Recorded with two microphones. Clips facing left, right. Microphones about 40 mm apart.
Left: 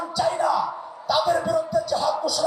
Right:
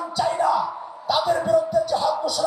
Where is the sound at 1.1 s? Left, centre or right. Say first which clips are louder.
Right 1 dB; right.